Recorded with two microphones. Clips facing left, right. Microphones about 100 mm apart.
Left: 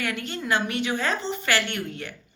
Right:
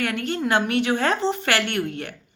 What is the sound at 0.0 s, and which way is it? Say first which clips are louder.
Speech: right 5 dB; 55° right (ahead or behind).